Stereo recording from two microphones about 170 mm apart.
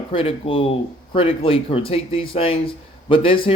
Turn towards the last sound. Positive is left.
turn(degrees=30)  # may be behind; listen again after turning